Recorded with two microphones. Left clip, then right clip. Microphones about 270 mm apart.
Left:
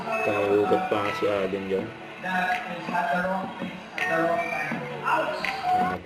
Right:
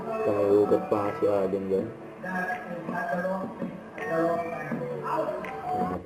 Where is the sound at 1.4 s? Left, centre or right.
Centre.